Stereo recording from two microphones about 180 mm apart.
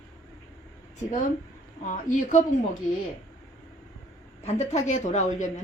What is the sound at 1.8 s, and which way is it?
Speech, 45° left (ahead or behind).